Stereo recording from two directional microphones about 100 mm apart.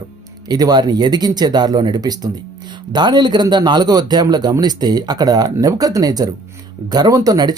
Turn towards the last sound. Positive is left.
turn(degrees=-40)  # may be behind; listen again after turning